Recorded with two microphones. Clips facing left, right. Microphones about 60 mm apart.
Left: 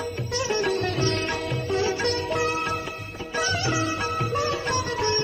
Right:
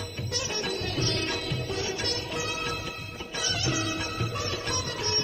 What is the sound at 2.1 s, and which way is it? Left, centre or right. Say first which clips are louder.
Music: left 8 dB; left.